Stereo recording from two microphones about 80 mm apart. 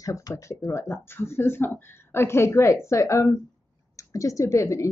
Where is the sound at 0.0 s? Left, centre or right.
Left.